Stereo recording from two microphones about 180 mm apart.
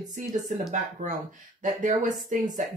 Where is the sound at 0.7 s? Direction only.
45° right (ahead or behind).